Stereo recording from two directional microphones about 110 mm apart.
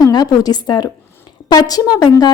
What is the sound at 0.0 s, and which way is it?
A woman's voice, 35° left (ahead or behind).